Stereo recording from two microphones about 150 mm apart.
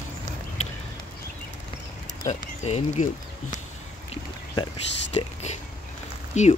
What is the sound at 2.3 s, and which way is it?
Speech, 50° left (ahead or behind).